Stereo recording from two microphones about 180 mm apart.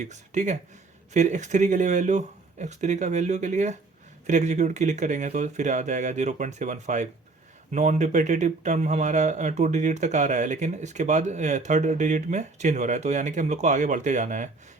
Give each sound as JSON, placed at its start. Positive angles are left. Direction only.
{"t": 0.0, "sound": "speech", "side_deg": -40}